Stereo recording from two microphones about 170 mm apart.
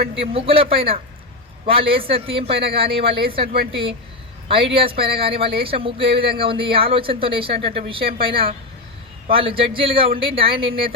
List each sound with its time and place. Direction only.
0.1 s speech: 35° right (ahead or behind)